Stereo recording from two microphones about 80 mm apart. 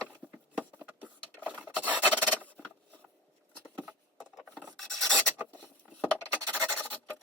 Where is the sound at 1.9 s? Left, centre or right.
Left.